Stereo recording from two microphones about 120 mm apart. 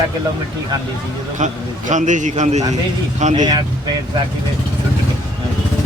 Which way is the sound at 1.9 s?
90° right.